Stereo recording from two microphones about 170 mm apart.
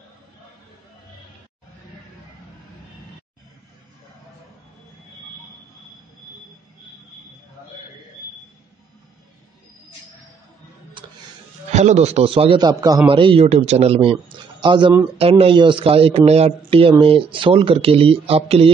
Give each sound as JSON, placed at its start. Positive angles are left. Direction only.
{"t": 11.7, "sound": "speech", "side_deg": -40}
{"t": 14.3, "sound": "a sound", "side_deg": -30}
{"t": 15.1, "sound": "speech", "side_deg": -35}